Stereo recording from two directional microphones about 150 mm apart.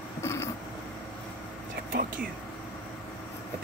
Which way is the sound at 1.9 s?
70° right (ahead or behind).